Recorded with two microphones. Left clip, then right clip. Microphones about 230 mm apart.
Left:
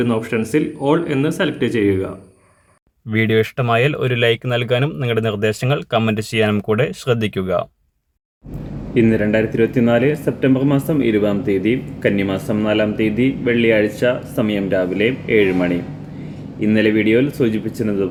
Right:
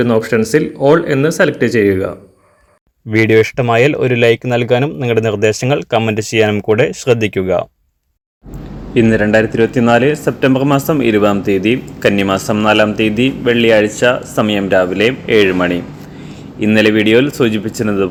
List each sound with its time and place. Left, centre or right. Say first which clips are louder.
0.0 s speech: right 7 dB; right
3.1 s speech: right 7 dB; centre
9.0 s speech: right 5 dB; centre